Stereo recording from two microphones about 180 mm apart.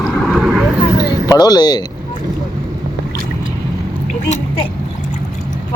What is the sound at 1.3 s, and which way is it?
Speech, 20° left (ahead or behind).